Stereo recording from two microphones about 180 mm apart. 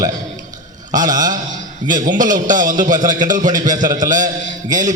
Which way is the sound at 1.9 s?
45° right (ahead or behind).